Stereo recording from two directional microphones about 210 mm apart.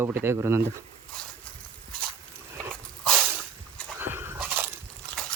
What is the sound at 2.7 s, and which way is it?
Dog, 5° left (ahead or behind).